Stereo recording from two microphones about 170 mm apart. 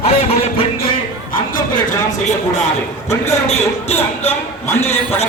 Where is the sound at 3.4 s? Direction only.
40° left (ahead or behind).